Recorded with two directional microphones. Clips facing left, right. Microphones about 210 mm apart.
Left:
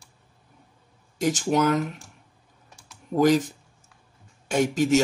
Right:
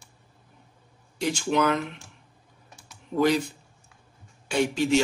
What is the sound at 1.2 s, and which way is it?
Speech, 45° left (ahead or behind).